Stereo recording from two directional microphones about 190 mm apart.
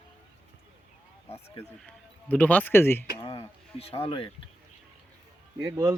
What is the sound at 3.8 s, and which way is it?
Speech, 30° left (ahead or behind).